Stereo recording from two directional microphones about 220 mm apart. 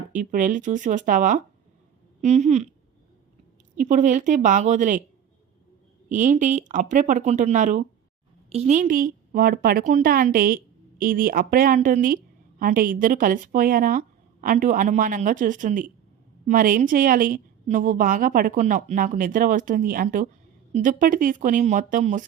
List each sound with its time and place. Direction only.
0.1 s a woman's voice: 35° right (ahead or behind)
3.8 s a woman's voice: 35° right (ahead or behind)
6.1 s a woman's voice: 35° right (ahead or behind)